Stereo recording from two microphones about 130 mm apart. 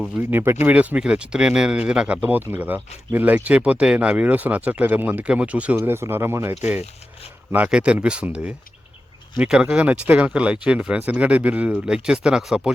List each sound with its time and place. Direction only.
0.2 s speech: 15° right (ahead or behind)